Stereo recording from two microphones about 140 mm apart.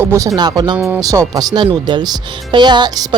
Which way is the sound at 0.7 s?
10° right (ahead or behind).